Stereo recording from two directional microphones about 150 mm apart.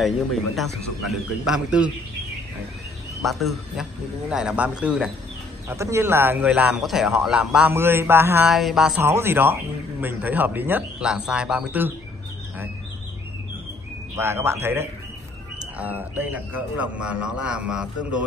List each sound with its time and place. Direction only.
0.0 s a man's voice: centre (ahead or behind)
3.3 s a man's voice: centre (ahead or behind)
5.7 s speech: 20° right (ahead or behind)
8.5 s a man's voice: 5° right (ahead or behind)
9.0 s speech: 15° right (ahead or behind)
14.1 s speech: 15° right (ahead or behind)